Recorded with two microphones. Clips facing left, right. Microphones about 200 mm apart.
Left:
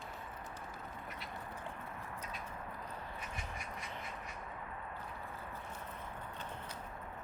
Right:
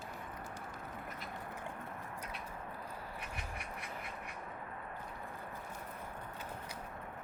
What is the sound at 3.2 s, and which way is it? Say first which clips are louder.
Quack: even; 60° right (ahead or behind).